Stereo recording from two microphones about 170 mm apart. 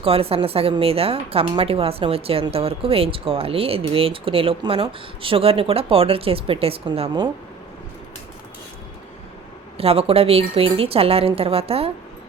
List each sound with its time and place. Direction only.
0.0 s a woman's voice: 35° right (ahead or behind)
9.7 s a woman's voice: 35° right (ahead or behind)